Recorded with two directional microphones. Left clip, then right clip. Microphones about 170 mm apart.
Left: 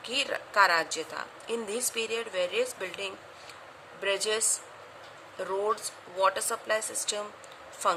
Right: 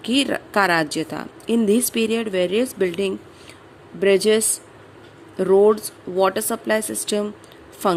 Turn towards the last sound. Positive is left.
turn(degrees=-40)  # may be behind; listen again after turning